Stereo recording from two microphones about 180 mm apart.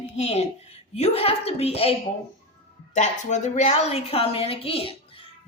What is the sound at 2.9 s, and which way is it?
A woman's voice, 40° left (ahead or behind).